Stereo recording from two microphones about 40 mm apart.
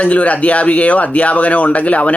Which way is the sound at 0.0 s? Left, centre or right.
Left.